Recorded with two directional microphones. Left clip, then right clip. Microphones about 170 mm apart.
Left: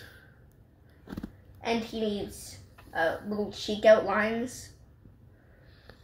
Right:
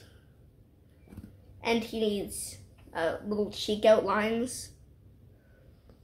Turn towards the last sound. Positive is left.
turn(degrees=-15)  # may be behind; listen again after turning